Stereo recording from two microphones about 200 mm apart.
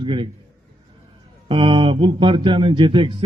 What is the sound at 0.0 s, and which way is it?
Speech, 25° right (ahead or behind).